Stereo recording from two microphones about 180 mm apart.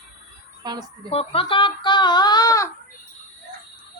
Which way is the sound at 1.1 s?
35° left (ahead or behind).